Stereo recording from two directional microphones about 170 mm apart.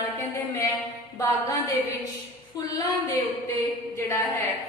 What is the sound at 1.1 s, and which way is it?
Speech, 20° left (ahead or behind).